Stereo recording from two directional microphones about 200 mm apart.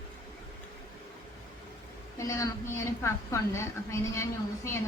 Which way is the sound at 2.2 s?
15° left (ahead or behind).